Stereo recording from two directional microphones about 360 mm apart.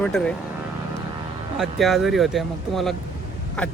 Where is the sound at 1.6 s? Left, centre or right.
Centre.